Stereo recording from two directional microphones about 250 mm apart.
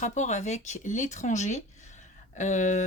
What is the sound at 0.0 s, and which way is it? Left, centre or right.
Speech, left.